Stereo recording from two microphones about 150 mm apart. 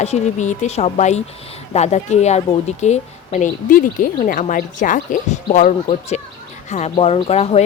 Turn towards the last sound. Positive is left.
turn(degrees=45)  # may be behind; listen again after turning